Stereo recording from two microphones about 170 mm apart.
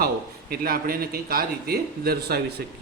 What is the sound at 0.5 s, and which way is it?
Speech, 60° right (ahead or behind).